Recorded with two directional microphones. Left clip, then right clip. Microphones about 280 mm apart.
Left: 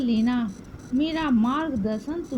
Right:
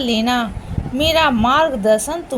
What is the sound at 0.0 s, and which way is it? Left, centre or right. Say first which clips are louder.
A woman's voice: right 8 dB; left.